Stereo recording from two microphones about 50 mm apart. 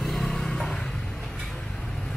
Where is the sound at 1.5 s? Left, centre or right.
Centre.